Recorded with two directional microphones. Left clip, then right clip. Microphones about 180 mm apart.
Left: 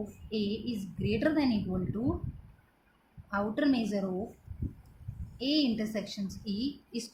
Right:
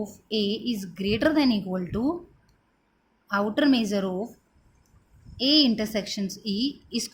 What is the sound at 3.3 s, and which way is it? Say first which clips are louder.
Speech: right 7 dB; 50° right (ahead or behind).